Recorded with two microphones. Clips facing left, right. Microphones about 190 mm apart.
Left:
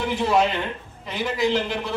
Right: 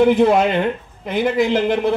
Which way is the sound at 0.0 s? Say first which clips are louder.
Right 8 dB; 55° right (ahead or behind).